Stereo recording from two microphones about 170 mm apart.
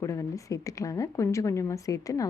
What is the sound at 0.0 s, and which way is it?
A woman's voice, 20° left (ahead or behind).